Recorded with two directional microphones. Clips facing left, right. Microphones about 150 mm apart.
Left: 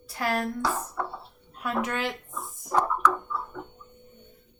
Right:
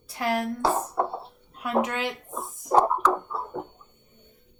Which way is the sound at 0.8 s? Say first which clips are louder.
Right 6 dB; 30° right (ahead or behind).